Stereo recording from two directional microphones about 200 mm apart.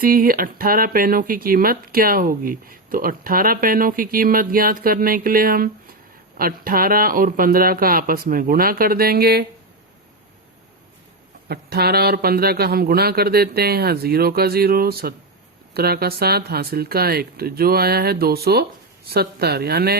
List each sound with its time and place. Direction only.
0.0 s speech: 45° right (ahead or behind)
11.4 s speech: 50° right (ahead or behind)